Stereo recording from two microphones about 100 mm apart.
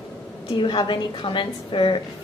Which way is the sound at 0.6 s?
50° left (ahead or behind).